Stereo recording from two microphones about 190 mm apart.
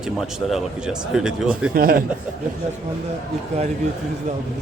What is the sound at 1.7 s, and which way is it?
Speech, 50° right (ahead or behind).